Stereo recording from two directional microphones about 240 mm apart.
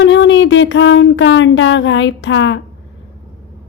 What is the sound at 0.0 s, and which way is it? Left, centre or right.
Speech, left.